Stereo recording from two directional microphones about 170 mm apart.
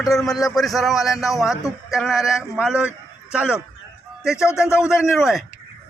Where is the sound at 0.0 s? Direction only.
Centre (ahead or behind).